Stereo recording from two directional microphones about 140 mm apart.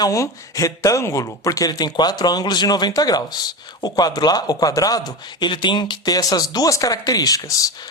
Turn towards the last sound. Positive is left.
turn(degrees=25)  # may be behind; listen again after turning